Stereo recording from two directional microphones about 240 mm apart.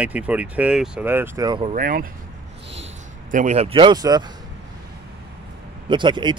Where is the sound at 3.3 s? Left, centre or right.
Right.